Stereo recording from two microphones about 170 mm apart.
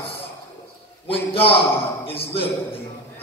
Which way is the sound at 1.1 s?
35° left (ahead or behind).